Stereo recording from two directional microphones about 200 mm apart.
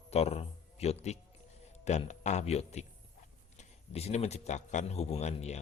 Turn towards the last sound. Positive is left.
turn(degrees=35)  # may be behind; listen again after turning